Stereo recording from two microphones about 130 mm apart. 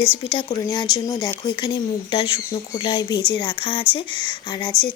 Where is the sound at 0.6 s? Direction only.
30° left (ahead or behind).